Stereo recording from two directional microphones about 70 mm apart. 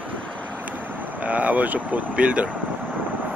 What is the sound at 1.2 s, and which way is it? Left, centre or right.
Speech, right.